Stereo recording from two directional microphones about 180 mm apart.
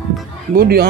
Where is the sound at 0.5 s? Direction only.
60° right (ahead or behind).